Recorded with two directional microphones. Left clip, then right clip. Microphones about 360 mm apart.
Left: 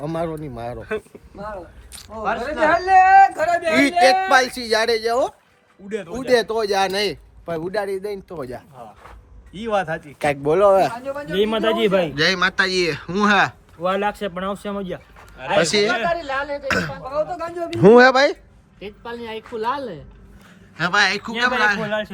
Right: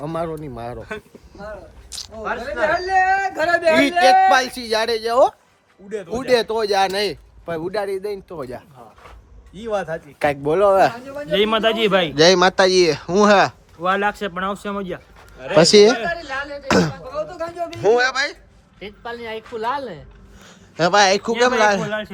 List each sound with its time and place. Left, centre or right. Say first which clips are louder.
0.0 s a man's voice: even; centre
2.2 s a man's voice: left 2 dB; centre
6.2 s a man's voice: even; centre
9.7 s speech: left 2 dB; left
10.2 s a man's voice: even; centre
16.0 s speech: left 3 dB; centre
16.6 s speech: right 7 dB; centre
16.9 s speech: left 4 dB; centre
18.8 s a man's voice: right 1 dB; centre